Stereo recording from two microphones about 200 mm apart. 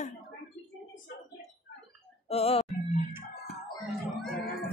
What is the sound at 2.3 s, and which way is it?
Music, 30° left (ahead or behind).